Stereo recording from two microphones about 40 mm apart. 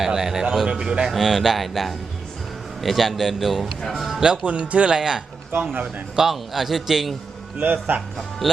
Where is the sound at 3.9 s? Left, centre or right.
Centre.